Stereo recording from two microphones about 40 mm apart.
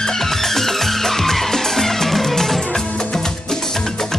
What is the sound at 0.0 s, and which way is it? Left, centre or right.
Music, centre.